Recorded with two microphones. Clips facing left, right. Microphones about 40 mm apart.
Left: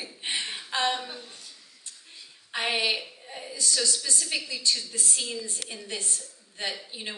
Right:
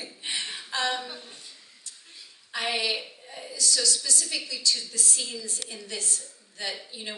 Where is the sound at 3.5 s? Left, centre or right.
Left.